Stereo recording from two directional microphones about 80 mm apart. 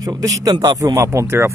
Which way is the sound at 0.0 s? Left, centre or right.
Right.